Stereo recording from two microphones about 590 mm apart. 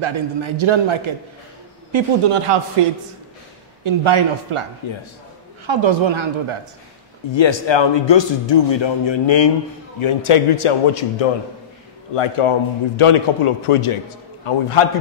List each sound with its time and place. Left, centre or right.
0.0 s a man's voice: right
5.7 s a man's voice: right
7.2 s a man's voice: left